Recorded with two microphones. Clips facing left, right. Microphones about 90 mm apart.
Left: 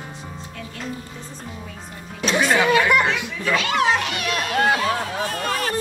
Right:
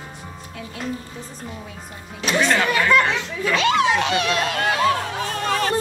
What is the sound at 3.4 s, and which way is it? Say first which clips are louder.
Speech: right 3 dB; 25° right (ahead or behind).